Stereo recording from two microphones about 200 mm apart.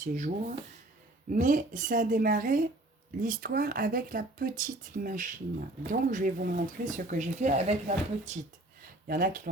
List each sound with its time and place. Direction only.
0.0 s speech: 40° right (ahead or behind)